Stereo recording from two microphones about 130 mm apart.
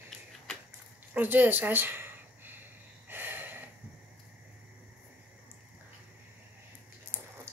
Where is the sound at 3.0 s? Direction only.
15° right (ahead or behind).